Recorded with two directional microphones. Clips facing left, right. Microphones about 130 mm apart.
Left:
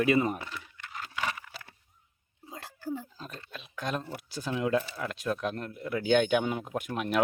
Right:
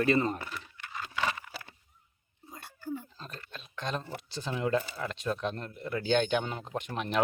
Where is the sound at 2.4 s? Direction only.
90° left.